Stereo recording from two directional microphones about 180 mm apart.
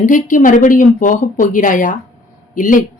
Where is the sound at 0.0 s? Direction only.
45° left (ahead or behind).